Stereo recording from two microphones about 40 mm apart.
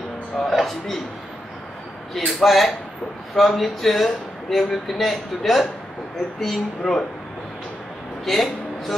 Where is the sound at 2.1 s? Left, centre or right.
Centre.